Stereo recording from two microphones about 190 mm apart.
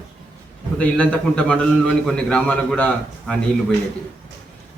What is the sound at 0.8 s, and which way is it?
A man's voice, 5° left (ahead or behind).